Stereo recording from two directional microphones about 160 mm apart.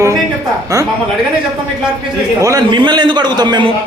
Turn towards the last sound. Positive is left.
turn(degrees=-25)  # may be behind; listen again after turning